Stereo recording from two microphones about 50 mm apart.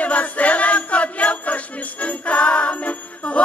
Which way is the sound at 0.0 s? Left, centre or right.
Left.